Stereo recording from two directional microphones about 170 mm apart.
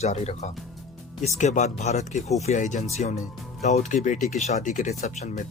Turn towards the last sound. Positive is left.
turn(degrees=45)  # may be behind; listen again after turning